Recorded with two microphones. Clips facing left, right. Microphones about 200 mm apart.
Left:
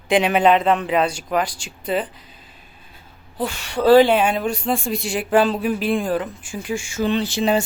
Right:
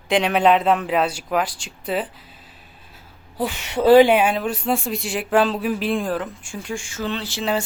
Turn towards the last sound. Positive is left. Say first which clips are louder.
# left 5 dB
turn(degrees=15)  # may be behind; listen again after turning